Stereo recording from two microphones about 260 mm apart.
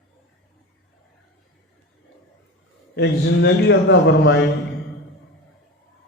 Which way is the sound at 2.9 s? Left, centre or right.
Left.